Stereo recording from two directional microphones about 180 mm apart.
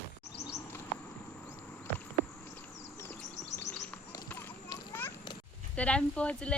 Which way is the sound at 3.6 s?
15° left (ahead or behind).